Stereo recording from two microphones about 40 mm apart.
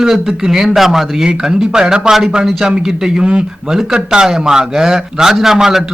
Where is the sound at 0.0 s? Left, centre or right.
Centre.